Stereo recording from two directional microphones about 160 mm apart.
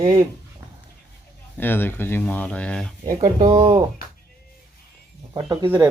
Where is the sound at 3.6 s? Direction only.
25° right (ahead or behind).